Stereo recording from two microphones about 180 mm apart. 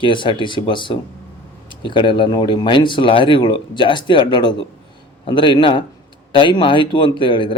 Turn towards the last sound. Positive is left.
turn(degrees=25)  # may be behind; listen again after turning